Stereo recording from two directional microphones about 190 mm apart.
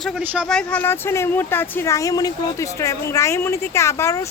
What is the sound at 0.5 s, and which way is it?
Speech, 10° left (ahead or behind).